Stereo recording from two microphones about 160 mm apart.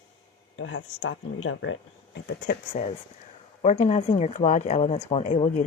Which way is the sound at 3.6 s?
45° left (ahead or behind).